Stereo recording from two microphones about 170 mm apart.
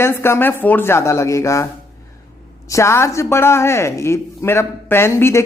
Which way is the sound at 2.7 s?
15° left (ahead or behind).